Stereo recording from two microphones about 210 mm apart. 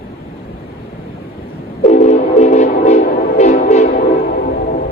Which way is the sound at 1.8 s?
35° left (ahead or behind).